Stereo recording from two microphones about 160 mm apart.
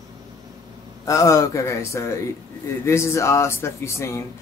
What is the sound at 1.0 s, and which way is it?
A man's voice, 20° left (ahead or behind).